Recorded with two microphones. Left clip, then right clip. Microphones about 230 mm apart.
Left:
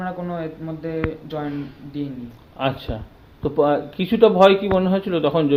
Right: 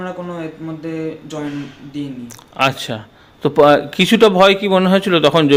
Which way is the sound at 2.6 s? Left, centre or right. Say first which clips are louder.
Right 8 dB; right.